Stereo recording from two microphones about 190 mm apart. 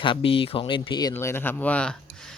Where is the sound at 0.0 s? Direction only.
25° left (ahead or behind).